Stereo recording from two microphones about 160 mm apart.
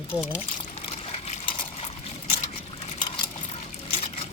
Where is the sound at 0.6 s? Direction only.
40° left (ahead or behind).